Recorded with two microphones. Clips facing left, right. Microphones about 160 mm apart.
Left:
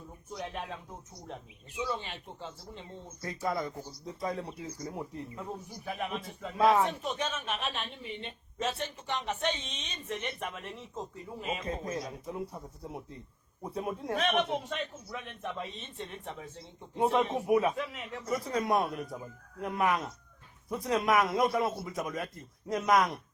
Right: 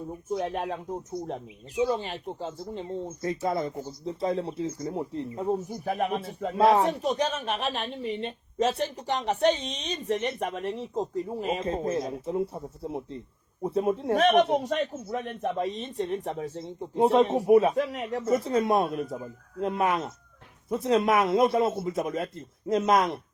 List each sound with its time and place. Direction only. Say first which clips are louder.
0.3 s speech: right 9 dB; 45° right (ahead or behind)
3.2 s a man's voice: right 4 dB; 25° right (ahead or behind); by 6.1 s 45° right (ahead or behind)
6.6 s a man's voice: right 4 dB; 30° right (ahead or behind)
14.2 s speech: right 8 dB; 45° right (ahead or behind)
18.2 s a man's voice: right 7 dB; 25° right (ahead or behind)